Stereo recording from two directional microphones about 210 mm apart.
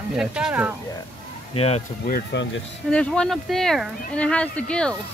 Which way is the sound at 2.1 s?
55° left (ahead or behind).